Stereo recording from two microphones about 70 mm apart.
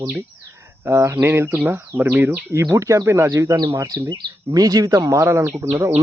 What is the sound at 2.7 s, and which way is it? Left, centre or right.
Speech, right.